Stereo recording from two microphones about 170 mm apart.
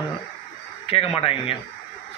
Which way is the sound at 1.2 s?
35° left (ahead or behind).